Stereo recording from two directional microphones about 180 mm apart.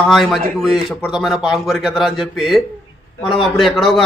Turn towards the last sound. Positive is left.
turn(degrees=0)  # may be behind; listen again after turning